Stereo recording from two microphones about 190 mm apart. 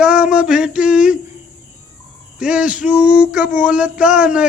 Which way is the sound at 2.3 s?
5° right (ahead or behind).